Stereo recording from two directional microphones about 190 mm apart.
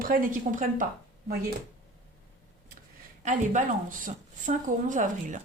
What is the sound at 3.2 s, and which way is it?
A woman's voice, 40° right (ahead or behind).